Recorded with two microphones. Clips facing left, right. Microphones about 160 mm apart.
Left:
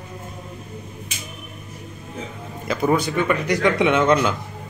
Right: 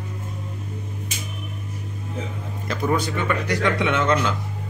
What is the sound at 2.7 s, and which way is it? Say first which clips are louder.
Speech: left 3 dB; 10° left (ahead or behind).